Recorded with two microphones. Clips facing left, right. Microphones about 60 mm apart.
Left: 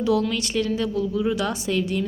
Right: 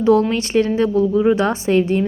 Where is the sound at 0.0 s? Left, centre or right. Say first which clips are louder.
Right 7 dB; right.